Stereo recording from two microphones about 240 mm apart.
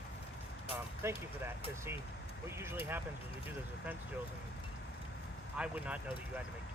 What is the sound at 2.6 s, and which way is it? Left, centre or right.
Speech, centre.